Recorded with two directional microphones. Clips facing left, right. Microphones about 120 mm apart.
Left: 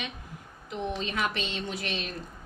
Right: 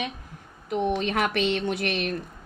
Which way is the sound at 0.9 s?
70° right (ahead or behind).